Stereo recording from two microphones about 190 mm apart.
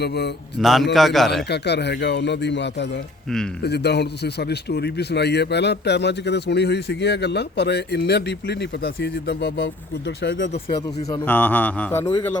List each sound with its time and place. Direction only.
0.6 s a man's voice: centre (ahead or behind)
1.5 s speech: 60° left (ahead or behind)
11.1 s a man's voice: 10° left (ahead or behind)